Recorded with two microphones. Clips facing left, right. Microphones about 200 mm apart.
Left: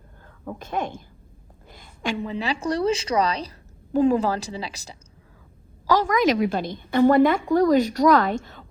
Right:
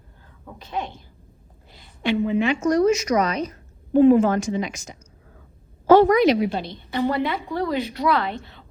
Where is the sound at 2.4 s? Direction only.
35° left (ahead or behind).